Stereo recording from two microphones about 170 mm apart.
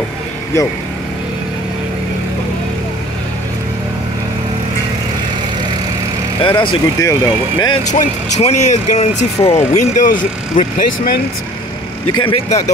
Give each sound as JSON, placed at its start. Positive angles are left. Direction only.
{"t": 6.4, "sound": "speech", "side_deg": 30}
{"t": 7.9, "sound": "speech", "side_deg": 40}
{"t": 12.2, "sound": "speech", "side_deg": 35}